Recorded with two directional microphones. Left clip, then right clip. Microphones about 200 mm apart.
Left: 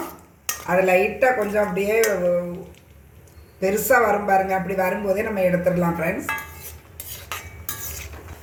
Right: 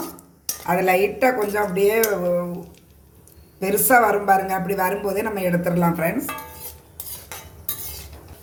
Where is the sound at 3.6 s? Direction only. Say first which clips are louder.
Right 1 dB; 50° right (ahead or behind).